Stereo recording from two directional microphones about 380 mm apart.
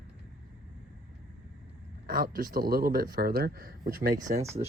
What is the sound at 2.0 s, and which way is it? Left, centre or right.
Speech, right.